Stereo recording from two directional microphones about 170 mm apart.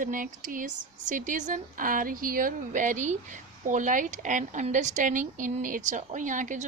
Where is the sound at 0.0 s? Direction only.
50° right (ahead or behind).